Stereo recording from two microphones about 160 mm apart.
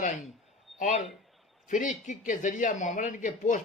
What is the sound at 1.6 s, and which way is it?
Speech, 50° left (ahead or behind).